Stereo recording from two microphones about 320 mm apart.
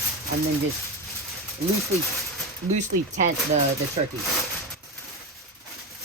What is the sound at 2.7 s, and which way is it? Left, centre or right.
Speech, right.